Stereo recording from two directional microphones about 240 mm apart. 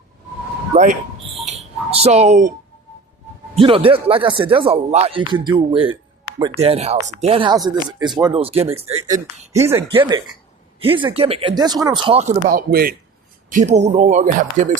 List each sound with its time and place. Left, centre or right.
0.7 s speech: right
1.5 s a sound: right
3.5 s speech: right
9.6 s speech: centre
12.5 s speech: right